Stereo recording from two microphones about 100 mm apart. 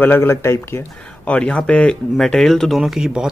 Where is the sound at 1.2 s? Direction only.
10° left (ahead or behind).